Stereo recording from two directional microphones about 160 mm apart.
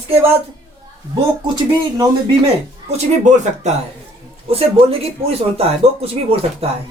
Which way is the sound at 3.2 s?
45° right (ahead or behind).